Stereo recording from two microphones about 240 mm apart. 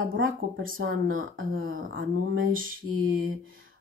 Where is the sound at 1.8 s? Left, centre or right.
Right.